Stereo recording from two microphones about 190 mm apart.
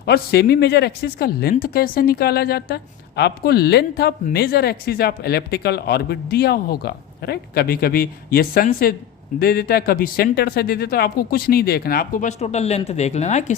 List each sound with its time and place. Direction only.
0.0 s a woman's voice: 60° left (ahead or behind); by 13.6 s 35° left (ahead or behind)